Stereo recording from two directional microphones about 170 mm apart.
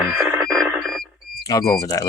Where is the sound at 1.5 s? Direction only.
20° left (ahead or behind).